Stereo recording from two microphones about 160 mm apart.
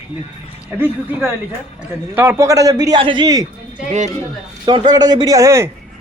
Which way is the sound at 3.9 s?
50° right (ahead or behind).